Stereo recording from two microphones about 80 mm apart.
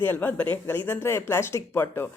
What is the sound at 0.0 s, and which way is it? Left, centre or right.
Speech, left.